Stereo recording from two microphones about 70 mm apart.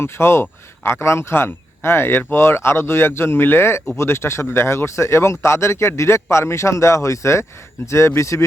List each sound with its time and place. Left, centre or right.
0.0 s speech: left